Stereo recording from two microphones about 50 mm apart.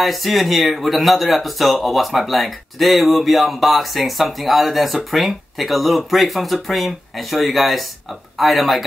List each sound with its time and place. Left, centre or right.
0.0 s speech: centre